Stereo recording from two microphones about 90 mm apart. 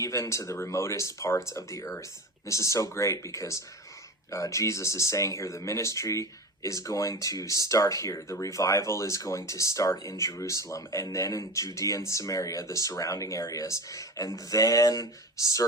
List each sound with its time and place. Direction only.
0.0 s speech: 35° left (ahead or behind)